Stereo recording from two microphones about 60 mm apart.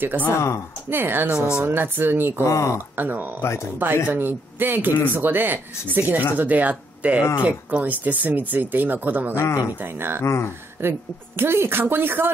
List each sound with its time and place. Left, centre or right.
0.8 s speech: right
1.3 s speech: centre
1.6 s speech: right
2.4 s speech: left
3.0 s speech: right
3.3 s speech: left
3.8 s speech: right
9.4 s speech: left
9.8 s speech: right
10.2 s speech: left
10.8 s speech: right